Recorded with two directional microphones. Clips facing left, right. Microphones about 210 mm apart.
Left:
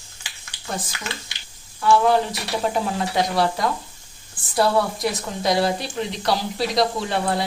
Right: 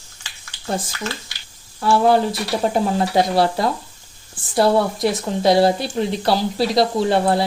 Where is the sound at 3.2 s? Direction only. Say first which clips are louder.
Right 3 dB; 30° right (ahead or behind).